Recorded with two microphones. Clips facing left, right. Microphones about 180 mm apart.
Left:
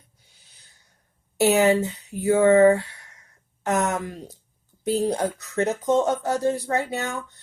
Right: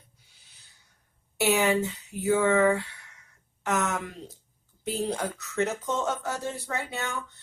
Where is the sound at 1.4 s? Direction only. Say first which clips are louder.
Left 6 dB; 40° left (ahead or behind).